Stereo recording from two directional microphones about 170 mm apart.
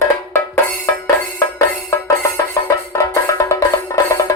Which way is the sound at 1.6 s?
20° left (ahead or behind).